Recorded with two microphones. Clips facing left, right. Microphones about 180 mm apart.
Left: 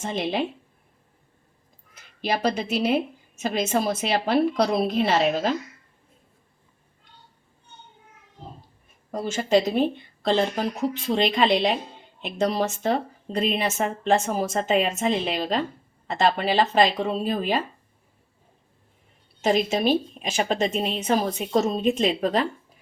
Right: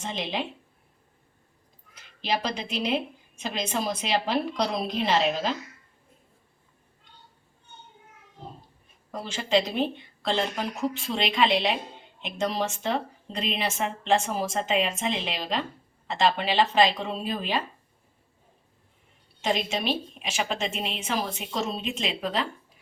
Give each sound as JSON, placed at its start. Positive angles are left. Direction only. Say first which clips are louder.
{"t": 0.0, "sound": "a woman's voice", "louder": "left 5 dB", "side_deg": 50}
{"t": 2.8, "sound": "a woman's voice", "louder": "left 3 dB", "side_deg": 45}
{"t": 9.2, "sound": "a woman's voice", "louder": "left 4 dB", "side_deg": 45}
{"t": 19.4, "sound": "a woman's voice", "louder": "left 6 dB", "side_deg": 40}